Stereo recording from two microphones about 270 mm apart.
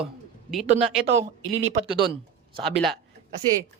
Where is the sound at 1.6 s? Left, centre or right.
Right.